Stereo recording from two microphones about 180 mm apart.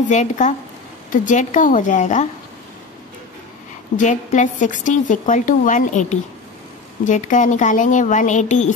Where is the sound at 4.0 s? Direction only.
45° left (ahead or behind).